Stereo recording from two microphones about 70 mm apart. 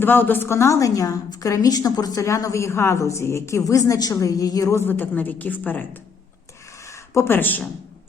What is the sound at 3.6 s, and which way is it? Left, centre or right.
Speech, left.